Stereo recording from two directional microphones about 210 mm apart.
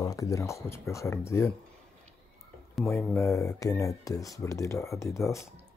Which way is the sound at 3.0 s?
10° left (ahead or behind).